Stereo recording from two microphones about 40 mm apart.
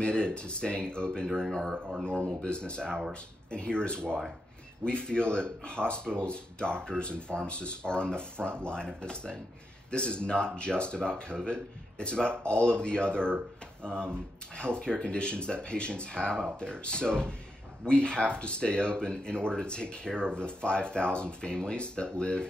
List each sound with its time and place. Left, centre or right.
0.0 s speech: left
14.6 s speech: left